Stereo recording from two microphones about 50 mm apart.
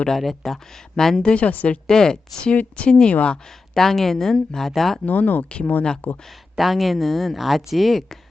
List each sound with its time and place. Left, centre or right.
0.1 s speech: centre
1.3 s speech: left
1.9 s speech: centre
3.3 s speech: centre
5.0 s speech: left
5.5 s speech: left
6.2 s speech: centre